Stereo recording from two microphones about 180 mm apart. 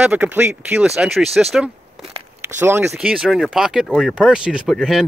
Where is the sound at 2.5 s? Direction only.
10° right (ahead or behind).